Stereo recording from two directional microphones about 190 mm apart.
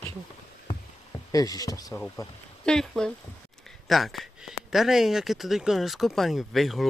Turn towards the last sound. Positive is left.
turn(degrees=0)  # may be behind; listen again after turning